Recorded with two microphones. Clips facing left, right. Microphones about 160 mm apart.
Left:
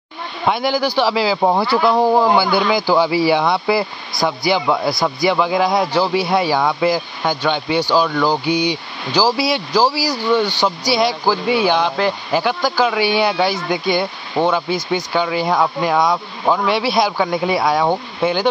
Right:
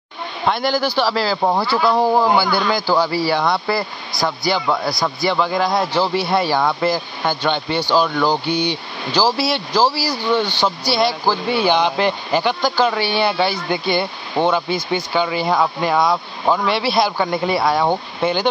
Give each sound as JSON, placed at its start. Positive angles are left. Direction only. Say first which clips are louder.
{"t": 0.5, "sound": "speech", "louder": "left 1 dB", "side_deg": 5}
{"t": 0.7, "sound": "speech", "louder": "left 2 dB", "side_deg": 15}
{"t": 1.9, "sound": "speech", "louder": "left 1 dB", "side_deg": 0}
{"t": 2.9, "sound": "speech", "louder": "left 4 dB", "side_deg": 15}